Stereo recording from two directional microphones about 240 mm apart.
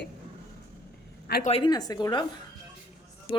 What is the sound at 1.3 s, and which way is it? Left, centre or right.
Speech, left.